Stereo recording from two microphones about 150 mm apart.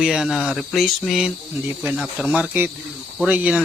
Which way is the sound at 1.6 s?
10° right (ahead or behind).